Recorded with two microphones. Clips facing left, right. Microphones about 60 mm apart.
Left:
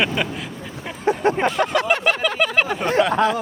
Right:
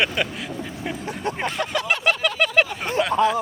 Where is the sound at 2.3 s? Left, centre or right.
Centre.